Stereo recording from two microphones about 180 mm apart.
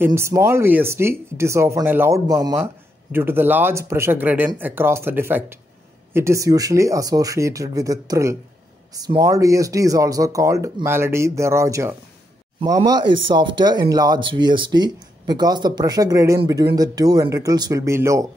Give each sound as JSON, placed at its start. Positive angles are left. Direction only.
{"t": 0.0, "sound": "speech", "side_deg": -15}